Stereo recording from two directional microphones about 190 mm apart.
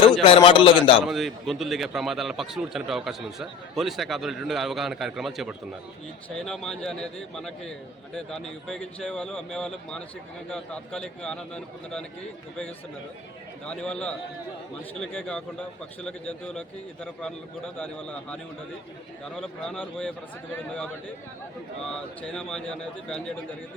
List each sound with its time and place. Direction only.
0.3 s a man's voice: 25° left (ahead or behind)
1.0 s a man's voice: centre (ahead or behind)
13.7 s a man's voice: 5° left (ahead or behind)
19.2 s a man's voice: 5° left (ahead or behind)
21.8 s a man's voice: 5° left (ahead or behind)